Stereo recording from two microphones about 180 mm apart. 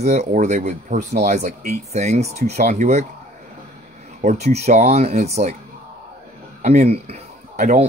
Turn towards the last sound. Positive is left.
turn(degrees=-40)  # may be behind; listen again after turning